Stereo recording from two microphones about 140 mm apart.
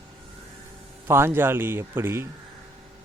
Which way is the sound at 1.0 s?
20° right (ahead or behind).